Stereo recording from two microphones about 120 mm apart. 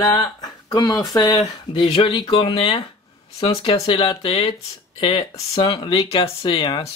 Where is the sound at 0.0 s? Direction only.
35° left (ahead or behind).